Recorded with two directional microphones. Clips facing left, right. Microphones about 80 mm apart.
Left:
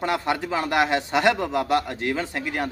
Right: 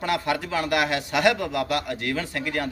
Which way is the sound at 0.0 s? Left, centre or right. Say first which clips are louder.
Left 1 dB; left.